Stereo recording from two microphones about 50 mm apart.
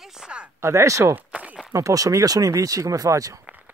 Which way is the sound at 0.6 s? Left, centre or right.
Right.